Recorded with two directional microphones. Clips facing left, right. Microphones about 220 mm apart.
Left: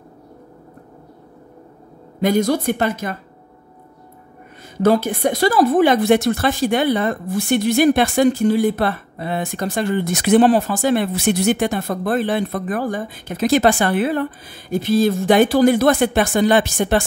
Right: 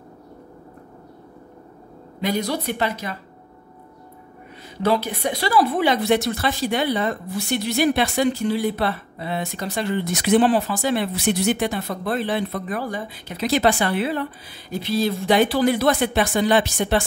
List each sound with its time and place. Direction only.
2.2 s a woman's voice: 50° left (ahead or behind)
4.7 s a woman's voice: 45° left (ahead or behind)